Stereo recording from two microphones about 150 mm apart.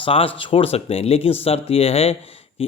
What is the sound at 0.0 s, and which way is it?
A man's voice, 40° left (ahead or behind).